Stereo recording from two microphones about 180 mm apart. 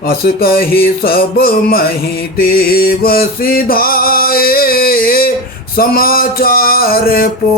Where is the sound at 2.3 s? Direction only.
55° left (ahead or behind).